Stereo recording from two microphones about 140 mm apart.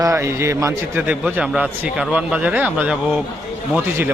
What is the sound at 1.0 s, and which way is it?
A man's voice, 10° right (ahead or behind).